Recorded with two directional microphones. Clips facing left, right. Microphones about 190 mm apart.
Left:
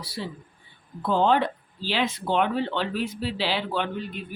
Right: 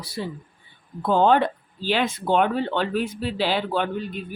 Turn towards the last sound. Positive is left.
turn(degrees=-45)  # may be behind; listen again after turning